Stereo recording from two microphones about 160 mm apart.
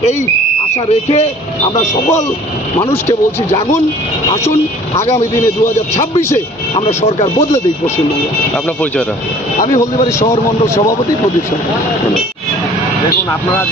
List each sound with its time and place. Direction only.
1.0 s speech: 40° left (ahead or behind)
2.8 s speech: 15° left (ahead or behind)
4.9 s speech: 40° left (ahead or behind)
6.9 s speech: 45° left (ahead or behind)